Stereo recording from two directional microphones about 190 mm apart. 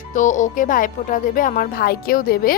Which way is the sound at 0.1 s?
40° left (ahead or behind).